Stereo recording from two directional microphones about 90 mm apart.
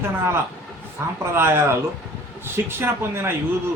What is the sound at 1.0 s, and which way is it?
Speech, 25° right (ahead or behind).